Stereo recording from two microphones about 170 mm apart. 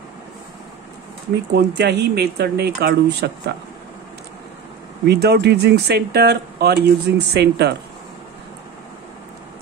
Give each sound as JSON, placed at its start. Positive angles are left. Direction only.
{"t": 1.3, "sound": "speech", "side_deg": -80}
{"t": 5.0, "sound": "speech", "side_deg": -75}